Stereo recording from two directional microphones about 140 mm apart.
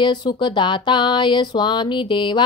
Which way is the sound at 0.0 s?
30° left (ahead or behind).